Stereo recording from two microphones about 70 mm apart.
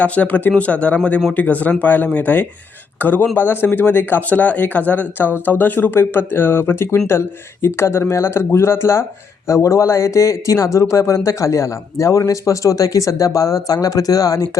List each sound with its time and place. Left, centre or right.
0.0 s speech: left